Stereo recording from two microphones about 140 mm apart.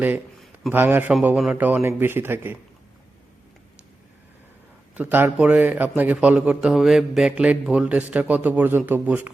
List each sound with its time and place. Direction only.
0.7 s a man's voice: 15° right (ahead or behind)
4.9 s a man's voice: 15° right (ahead or behind)